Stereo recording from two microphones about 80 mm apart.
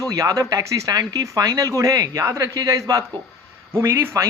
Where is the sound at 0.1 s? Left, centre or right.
Right.